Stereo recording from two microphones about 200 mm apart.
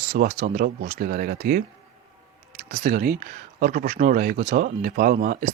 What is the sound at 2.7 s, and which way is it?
Speech, 45° right (ahead or behind).